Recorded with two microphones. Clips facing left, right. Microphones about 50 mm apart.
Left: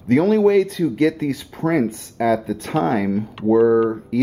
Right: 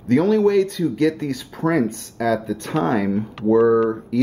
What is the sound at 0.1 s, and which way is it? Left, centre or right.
Speech, centre.